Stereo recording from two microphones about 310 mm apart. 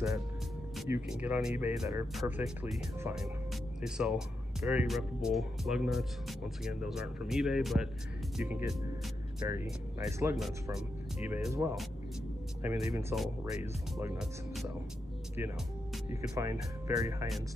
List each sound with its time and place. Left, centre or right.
0.7 s speech: centre